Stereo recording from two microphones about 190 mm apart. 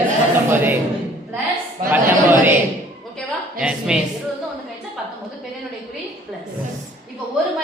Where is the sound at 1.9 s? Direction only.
10° right (ahead or behind).